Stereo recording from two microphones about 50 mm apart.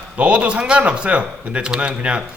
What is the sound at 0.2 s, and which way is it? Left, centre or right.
A man's voice, right.